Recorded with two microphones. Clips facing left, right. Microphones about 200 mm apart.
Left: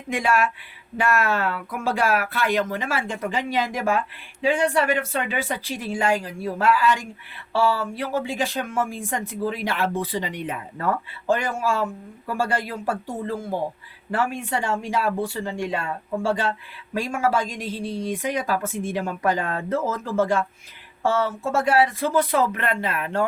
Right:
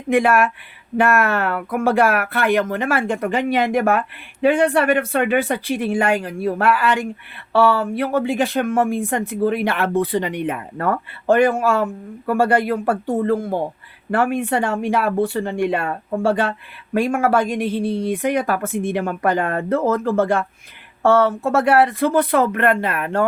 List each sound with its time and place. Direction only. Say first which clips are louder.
0.1 s speech: right 6 dB; 55° right (ahead or behind)